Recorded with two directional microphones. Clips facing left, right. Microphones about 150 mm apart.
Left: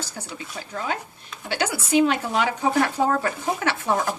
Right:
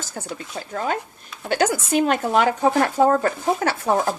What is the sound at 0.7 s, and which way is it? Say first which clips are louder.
Speech: right 4 dB; 45° right (ahead or behind).